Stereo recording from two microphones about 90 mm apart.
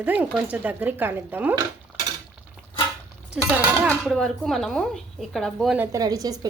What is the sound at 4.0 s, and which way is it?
Speech, 5° left (ahead or behind).